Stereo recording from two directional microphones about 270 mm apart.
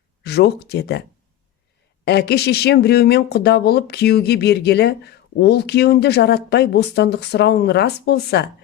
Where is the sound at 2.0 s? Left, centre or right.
Left.